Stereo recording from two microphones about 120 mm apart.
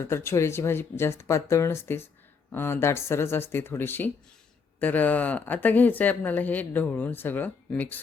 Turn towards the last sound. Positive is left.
turn(degrees=15)  # may be behind; listen again after turning